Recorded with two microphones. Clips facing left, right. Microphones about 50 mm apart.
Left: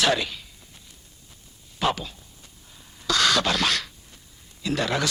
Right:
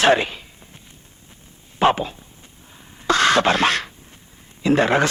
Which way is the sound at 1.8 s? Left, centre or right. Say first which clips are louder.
Right 8 dB; right.